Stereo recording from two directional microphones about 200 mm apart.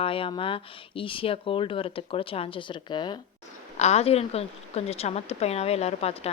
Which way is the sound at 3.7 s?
35° left (ahead or behind).